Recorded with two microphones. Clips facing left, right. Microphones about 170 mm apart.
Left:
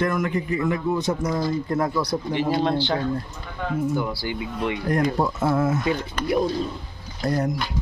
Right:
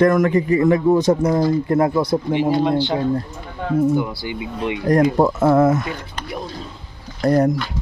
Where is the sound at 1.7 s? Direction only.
55° right (ahead or behind).